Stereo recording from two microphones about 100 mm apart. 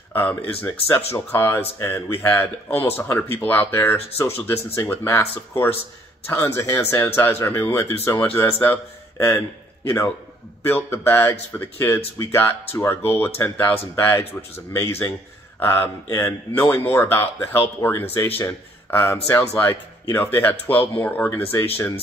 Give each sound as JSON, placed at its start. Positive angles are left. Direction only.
{"t": 0.1, "sound": "speech", "side_deg": 20}
{"t": 9.8, "sound": "speech", "side_deg": 25}